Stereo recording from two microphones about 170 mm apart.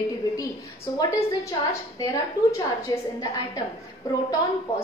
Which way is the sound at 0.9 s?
20° left (ahead or behind).